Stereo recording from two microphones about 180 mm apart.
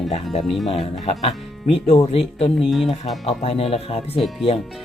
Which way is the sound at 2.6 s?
Centre (ahead or behind).